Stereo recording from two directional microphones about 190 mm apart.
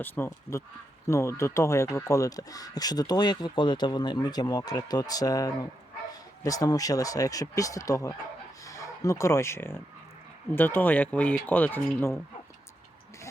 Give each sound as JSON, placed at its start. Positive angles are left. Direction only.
{"t": 0.0, "sound": "speech", "side_deg": 15}